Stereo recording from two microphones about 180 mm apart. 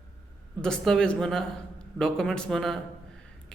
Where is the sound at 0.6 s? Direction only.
5° left (ahead or behind).